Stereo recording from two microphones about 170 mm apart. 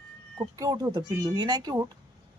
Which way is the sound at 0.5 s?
20° right (ahead or behind).